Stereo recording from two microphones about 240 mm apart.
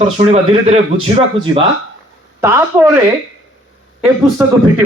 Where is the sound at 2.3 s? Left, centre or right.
Centre.